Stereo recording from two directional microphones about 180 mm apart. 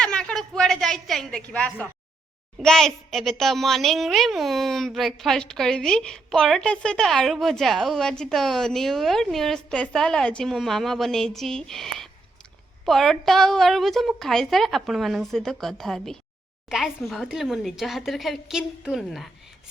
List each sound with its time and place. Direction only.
0.0 s a woman's voice: 5° left (ahead or behind)